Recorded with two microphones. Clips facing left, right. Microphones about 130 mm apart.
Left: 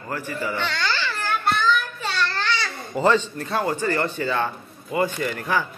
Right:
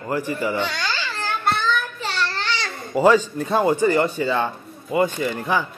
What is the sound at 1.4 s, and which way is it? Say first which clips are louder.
Child singing: even; 30° right (ahead or behind).